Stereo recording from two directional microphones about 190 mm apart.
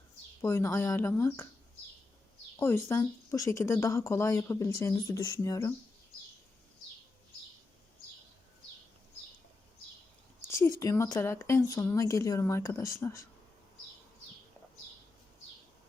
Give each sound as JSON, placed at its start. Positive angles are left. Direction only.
{"t": 0.4, "sound": "speech", "side_deg": 15}
{"t": 2.6, "sound": "speech", "side_deg": 15}
{"t": 10.8, "sound": "speech", "side_deg": 15}